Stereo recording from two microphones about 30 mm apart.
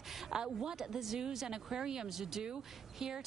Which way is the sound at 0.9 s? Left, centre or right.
Centre.